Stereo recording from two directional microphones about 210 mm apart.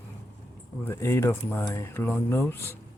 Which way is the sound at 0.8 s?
15° left (ahead or behind).